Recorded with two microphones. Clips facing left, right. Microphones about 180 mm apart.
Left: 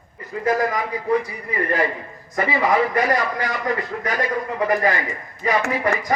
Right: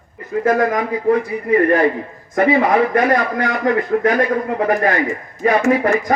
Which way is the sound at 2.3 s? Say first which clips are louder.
Right 6 dB; 55° right (ahead or behind).